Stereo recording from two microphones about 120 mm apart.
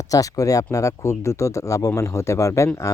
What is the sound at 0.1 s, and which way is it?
Speech, 30° left (ahead or behind).